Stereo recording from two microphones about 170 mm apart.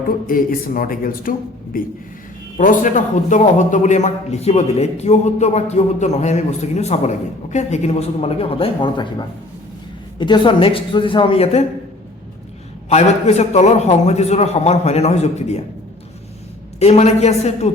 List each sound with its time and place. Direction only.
0.3 s a man's voice: 55° left (ahead or behind); by 11.6 s 35° left (ahead or behind)
12.9 s a man's voice: 40° left (ahead or behind)
16.8 s a man's voice: 40° left (ahead or behind)